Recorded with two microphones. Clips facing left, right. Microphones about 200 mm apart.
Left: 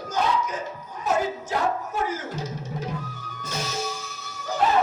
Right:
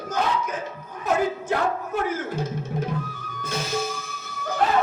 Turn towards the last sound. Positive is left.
turn(degrees=-55)  # may be behind; listen again after turning